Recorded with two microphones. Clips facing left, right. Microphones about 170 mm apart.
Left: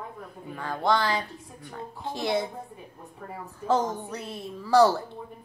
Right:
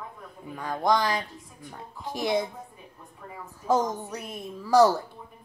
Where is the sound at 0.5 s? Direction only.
15° right (ahead or behind).